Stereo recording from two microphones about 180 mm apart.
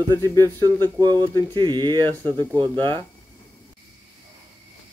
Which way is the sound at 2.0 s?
10° left (ahead or behind).